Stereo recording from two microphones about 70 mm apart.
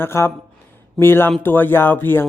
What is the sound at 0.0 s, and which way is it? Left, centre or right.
Speech, left.